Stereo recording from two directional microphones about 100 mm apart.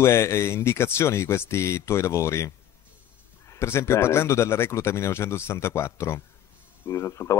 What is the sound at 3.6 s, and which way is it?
Speech, 25° left (ahead or behind).